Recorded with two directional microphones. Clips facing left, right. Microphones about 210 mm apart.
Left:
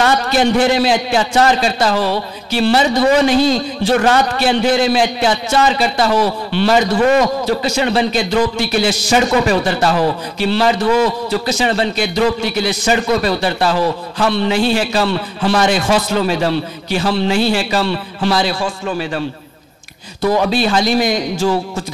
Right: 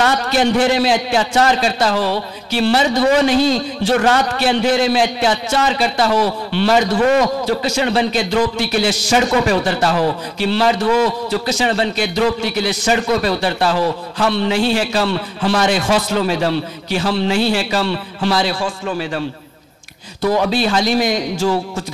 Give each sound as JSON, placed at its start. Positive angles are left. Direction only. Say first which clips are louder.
{"t": 0.0, "sound": "a sound", "louder": "left 2 dB", "side_deg": 10}
{"t": 0.6, "sound": "a man's voice", "louder": "left 1 dB", "side_deg": 10}
{"t": 7.6, "sound": "a man's voice", "louder": "left 1 dB", "side_deg": 10}
{"t": 10.9, "sound": "a man's voice", "louder": "left 2 dB", "side_deg": 25}
{"t": 11.2, "sound": "a man's voice", "louder": "left 1 dB", "side_deg": 15}